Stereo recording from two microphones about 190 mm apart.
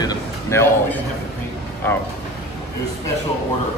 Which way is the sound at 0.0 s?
15° left (ahead or behind).